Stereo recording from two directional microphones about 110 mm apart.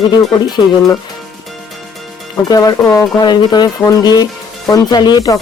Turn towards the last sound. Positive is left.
turn(degrees=35)  # may be behind; listen again after turning